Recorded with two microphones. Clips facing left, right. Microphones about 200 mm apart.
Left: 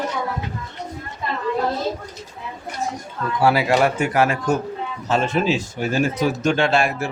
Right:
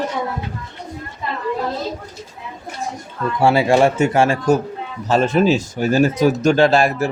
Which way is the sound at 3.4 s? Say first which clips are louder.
Right 3 dB; 25° right (ahead or behind).